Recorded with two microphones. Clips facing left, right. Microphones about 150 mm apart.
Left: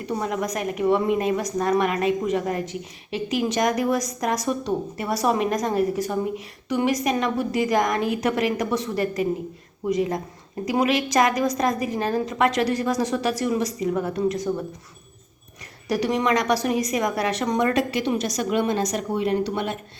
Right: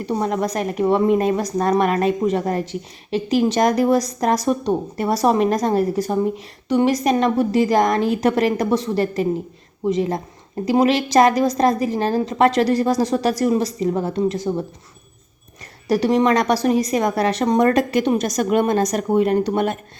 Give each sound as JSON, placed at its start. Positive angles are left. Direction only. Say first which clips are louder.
{"t": 0.0, "sound": "a woman's voice", "louder": "right 5 dB", "side_deg": -35}
{"t": 15.9, "sound": "a woman's voice", "louder": "right 5 dB", "side_deg": -30}